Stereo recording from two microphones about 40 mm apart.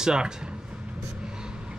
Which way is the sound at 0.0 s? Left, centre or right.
Centre.